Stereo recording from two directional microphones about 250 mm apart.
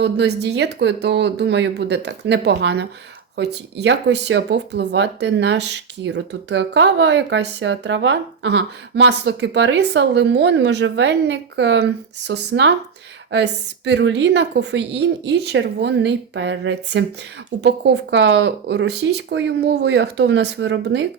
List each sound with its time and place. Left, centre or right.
0.0 s speech: right